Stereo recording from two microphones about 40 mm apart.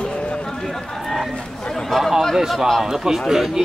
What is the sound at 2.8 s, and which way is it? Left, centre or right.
Speech, centre.